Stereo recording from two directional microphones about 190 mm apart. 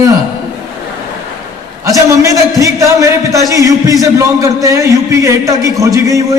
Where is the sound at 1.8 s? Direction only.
15° right (ahead or behind).